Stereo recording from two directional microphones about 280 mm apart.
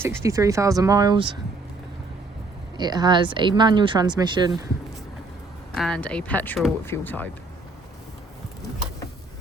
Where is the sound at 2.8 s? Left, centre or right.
Centre.